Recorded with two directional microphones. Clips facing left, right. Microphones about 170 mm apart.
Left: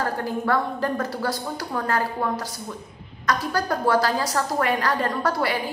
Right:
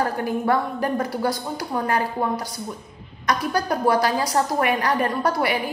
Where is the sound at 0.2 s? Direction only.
15° right (ahead or behind).